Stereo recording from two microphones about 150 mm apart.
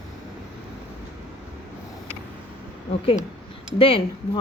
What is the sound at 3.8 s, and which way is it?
Speech, 40° left (ahead or behind).